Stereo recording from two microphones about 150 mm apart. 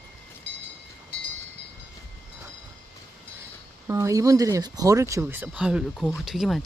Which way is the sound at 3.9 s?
20° right (ahead or behind).